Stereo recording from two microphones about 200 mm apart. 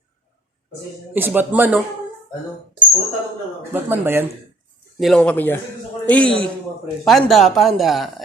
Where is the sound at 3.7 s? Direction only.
10° right (ahead or behind).